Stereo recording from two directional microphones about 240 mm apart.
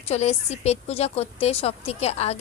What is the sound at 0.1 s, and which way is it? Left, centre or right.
A woman's voice, left.